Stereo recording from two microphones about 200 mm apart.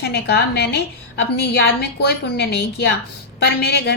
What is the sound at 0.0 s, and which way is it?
A woman's voice, 55° left (ahead or behind).